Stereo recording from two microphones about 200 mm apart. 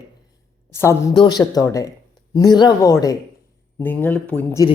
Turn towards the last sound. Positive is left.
turn(degrees=10)  # may be behind; listen again after turning